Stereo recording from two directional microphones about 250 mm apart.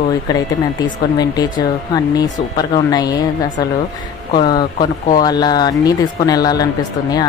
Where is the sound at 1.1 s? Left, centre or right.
Centre.